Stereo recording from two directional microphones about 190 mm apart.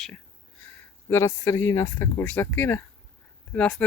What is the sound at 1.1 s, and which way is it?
Speech, 15° left (ahead or behind).